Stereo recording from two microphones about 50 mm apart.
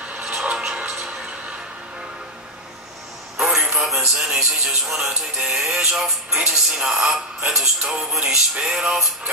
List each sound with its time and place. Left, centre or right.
0.2 s music: centre
3.6 s music: centre
4.2 s speech: centre